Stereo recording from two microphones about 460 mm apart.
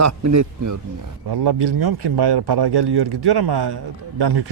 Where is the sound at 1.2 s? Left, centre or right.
Right.